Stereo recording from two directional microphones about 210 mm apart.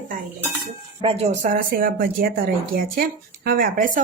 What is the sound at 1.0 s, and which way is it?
Speech, 30° right (ahead or behind).